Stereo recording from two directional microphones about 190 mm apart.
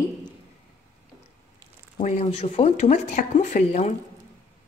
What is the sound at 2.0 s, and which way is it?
A woman's voice, 35° left (ahead or behind).